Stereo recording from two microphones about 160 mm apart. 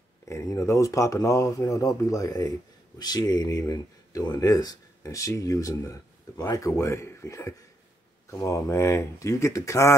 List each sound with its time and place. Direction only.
0.3 s speech: 20° left (ahead or behind)